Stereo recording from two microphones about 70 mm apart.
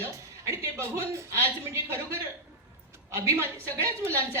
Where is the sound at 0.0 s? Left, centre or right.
Right.